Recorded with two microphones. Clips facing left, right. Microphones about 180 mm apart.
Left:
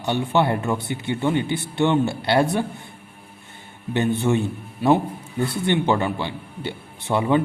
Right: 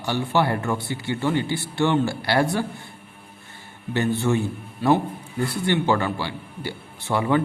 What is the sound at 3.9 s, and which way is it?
A man's voice, 20° left (ahead or behind).